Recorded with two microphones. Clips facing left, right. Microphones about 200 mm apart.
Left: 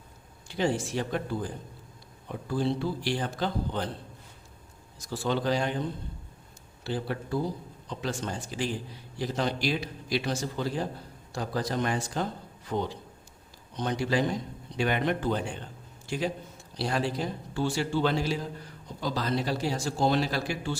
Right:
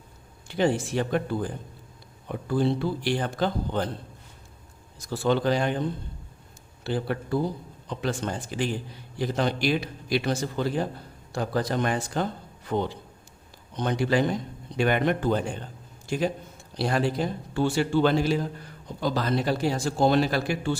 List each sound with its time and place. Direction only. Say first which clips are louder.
0.4 s a man's voice: right 4 dB; 60° right (ahead or behind)
2.5 s a man's voice: right 4 dB; 60° right (ahead or behind)
4.9 s a man's voice: right 5 dB; 55° right (ahead or behind)
6.8 s a man's voice: right 4 dB; 60° right (ahead or behind)